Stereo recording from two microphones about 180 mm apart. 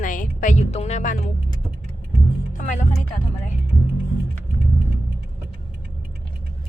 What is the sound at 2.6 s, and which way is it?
Music, 45° left (ahead or behind).